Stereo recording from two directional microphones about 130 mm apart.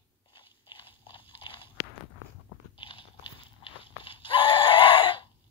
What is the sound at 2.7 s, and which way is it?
Biting, 40° left (ahead or behind).